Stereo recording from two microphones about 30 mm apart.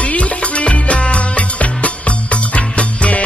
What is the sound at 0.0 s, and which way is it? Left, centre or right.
Music, left.